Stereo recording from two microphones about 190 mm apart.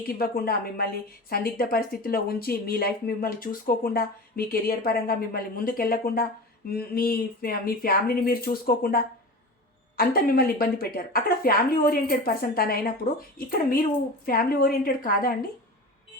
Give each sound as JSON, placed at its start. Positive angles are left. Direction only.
{"t": 0.2, "sound": "speech", "side_deg": 50}